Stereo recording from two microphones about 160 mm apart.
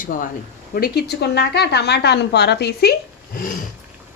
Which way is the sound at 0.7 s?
75° left (ahead or behind).